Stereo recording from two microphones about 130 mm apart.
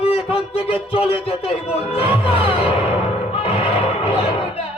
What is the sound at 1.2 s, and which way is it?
Music, 50° left (ahead or behind).